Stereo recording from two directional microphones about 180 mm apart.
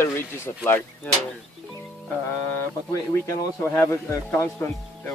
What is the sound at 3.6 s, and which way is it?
Speech, 15° left (ahead or behind).